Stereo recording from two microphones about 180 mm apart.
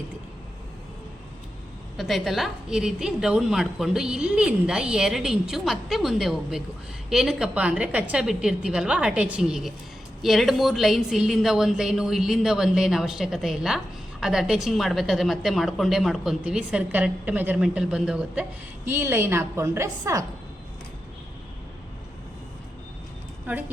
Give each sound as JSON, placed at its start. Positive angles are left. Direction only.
{"t": 2.0, "sound": "a woman's voice", "side_deg": 0}
{"t": 23.5, "sound": "a woman's voice", "side_deg": -10}